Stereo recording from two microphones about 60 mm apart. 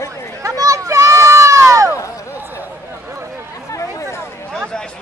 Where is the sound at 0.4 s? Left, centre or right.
Right.